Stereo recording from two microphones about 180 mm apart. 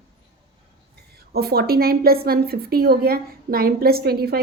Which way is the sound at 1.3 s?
60° right (ahead or behind).